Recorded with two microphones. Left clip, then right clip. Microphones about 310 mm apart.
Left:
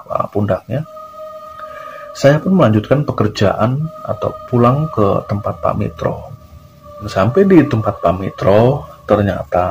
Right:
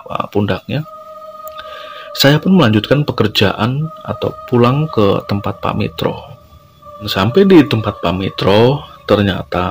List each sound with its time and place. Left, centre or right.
0.3 s speech: right
2.1 s speech: right